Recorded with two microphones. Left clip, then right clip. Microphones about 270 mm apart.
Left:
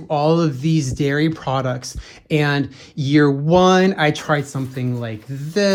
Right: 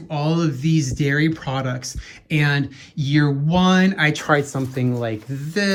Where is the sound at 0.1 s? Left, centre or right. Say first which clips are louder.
Left 6 dB; centre.